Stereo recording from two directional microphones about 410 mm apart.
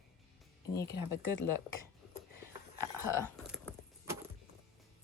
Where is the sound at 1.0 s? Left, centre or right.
Left.